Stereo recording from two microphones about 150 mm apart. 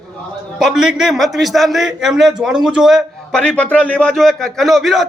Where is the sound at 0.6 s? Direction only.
5° right (ahead or behind).